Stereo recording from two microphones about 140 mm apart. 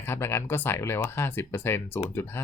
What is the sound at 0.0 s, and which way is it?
Speech, 15° left (ahead or behind).